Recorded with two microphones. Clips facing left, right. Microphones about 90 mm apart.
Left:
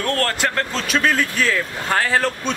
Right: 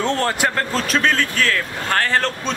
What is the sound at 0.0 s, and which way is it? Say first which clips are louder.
Speech: right 2 dB; 15° right (ahead or behind).